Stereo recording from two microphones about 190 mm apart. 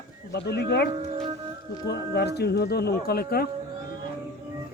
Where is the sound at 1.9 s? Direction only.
60° left (ahead or behind).